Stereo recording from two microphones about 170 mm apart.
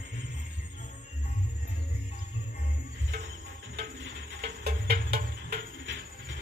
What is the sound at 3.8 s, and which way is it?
Music, 70° right (ahead or behind).